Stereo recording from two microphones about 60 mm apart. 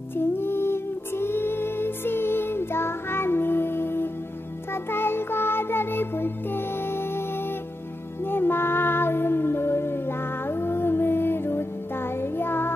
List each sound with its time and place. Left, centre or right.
0.1 s music: left